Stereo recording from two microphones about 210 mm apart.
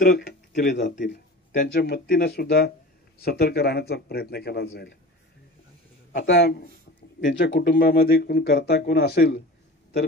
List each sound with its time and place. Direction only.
0.6 s speech: 55° left (ahead or behind)
0.8 s speech: 40° left (ahead or behind)
6.2 s speech: 55° left (ahead or behind)